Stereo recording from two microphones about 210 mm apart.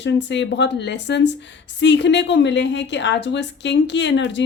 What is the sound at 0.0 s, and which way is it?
A woman's voice, 60° left (ahead or behind).